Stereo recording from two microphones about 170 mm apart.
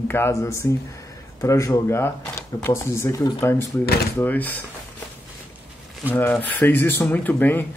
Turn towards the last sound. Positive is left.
turn(degrees=10)  # may be behind; listen again after turning